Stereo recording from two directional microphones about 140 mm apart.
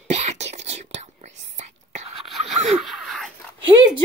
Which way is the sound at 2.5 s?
50° right (ahead or behind).